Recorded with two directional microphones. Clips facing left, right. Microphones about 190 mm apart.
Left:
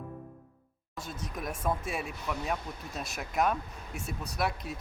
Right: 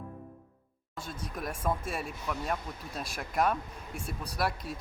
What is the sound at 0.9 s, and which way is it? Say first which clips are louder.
Speech: even; 30° right (ahead or behind).